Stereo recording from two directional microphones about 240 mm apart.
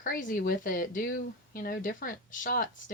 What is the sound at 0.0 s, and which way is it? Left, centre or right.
Speech, left.